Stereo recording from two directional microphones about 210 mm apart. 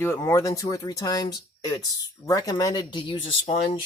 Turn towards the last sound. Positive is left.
turn(degrees=30)  # may be behind; listen again after turning